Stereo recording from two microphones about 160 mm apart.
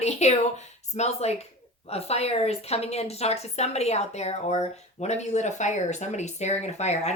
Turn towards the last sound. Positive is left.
turn(degrees=45)  # may be behind; listen again after turning